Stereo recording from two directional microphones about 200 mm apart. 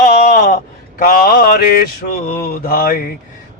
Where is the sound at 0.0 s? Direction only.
40° left (ahead or behind).